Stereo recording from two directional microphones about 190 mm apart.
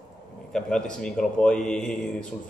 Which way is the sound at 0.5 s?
5° left (ahead or behind).